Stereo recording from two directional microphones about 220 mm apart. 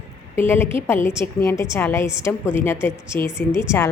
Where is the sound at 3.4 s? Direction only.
45° left (ahead or behind).